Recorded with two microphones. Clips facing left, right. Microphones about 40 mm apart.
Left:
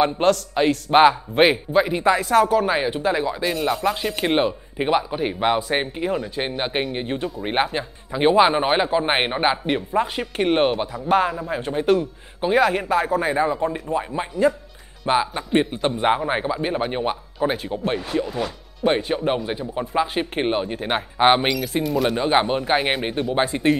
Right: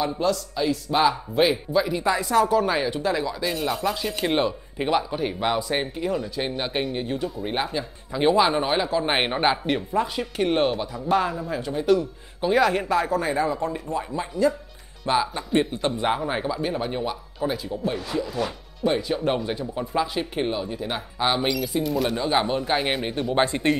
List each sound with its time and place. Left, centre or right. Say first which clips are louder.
0.0 s speech: left 6 dB; left
3.4 s speech: left 4 dB; centre
3.9 s speech: left 3 dB; left
8.1 s speech: left 3 dB; left
9.1 s speech: left 2 dB; centre
10.1 s speech: left 3 dB; left
12.4 s speech: left 2 dB; centre; by 19.2 s left
19.2 s speech: left 2 dB; centre
20.3 s speech: left 4 dB; left
21.8 s speech: left 5 dB; centre
22.1 s speech: left 3 dB; left
22.8 s speech: left 3 dB; centre